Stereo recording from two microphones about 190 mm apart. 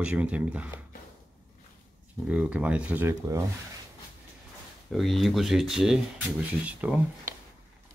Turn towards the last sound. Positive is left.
turn(degrees=-10)  # may be behind; listen again after turning